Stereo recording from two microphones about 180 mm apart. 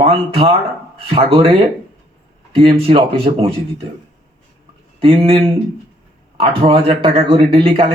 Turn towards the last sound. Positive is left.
turn(degrees=-30)  # may be behind; listen again after turning